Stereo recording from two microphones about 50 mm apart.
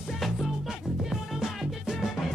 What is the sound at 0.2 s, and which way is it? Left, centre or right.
Music, centre.